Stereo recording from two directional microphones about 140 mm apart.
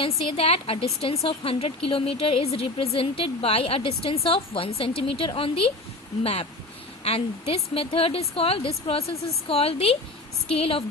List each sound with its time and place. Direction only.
0.3 s speech: 45° left (ahead or behind)